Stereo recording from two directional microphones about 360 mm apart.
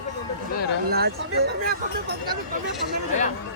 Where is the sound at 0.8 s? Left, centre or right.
Right.